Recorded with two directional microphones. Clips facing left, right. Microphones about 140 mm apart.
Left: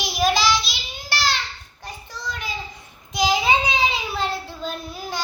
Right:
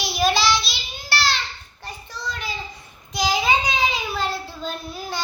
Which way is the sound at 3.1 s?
20° left (ahead or behind).